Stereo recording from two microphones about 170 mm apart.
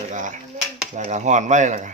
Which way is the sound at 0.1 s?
50° right (ahead or behind).